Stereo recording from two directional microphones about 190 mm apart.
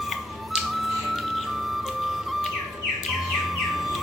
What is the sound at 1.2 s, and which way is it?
Music, centre (ahead or behind).